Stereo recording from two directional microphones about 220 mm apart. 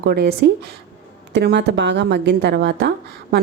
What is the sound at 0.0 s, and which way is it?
A woman's voice, 45° right (ahead or behind).